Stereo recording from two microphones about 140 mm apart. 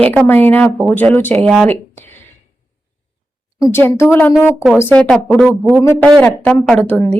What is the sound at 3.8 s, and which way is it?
A woman's voice, 15° left (ahead or behind).